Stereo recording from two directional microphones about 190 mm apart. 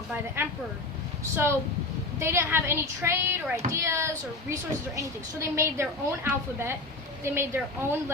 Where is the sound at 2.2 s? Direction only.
10° right (ahead or behind).